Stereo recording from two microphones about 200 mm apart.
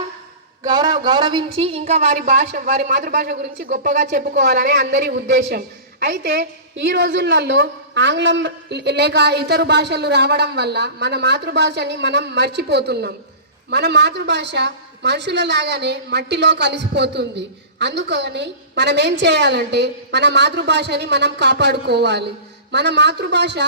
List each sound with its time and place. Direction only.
0.7 s speech: 20° right (ahead or behind); by 23.6 s 60° right (ahead or behind)